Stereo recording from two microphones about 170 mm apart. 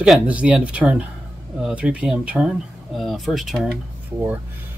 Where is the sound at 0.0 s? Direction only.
5° right (ahead or behind).